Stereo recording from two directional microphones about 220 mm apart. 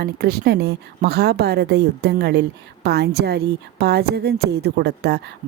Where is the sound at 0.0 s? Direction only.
45° right (ahead or behind).